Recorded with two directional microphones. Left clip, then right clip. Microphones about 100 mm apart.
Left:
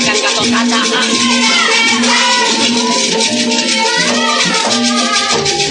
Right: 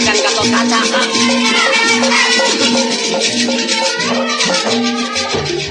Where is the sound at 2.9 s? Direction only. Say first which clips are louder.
Left 3 dB; 35° left (ahead or behind).